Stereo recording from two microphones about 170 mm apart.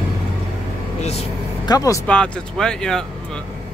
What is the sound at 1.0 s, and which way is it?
Vehicle, 40° left (ahead or behind).